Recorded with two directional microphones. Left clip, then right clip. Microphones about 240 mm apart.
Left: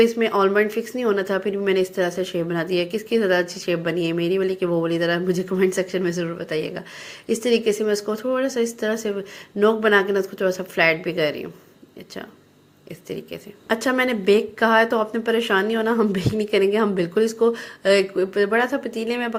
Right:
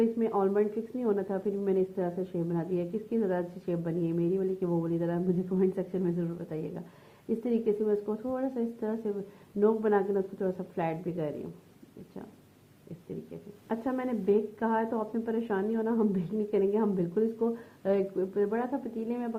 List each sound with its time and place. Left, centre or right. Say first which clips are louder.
0.0 s a woman's voice: left 10 dB; centre
8.0 s a woman's voice: left 10 dB; left
13.7 s a woman's voice: left 13 dB; left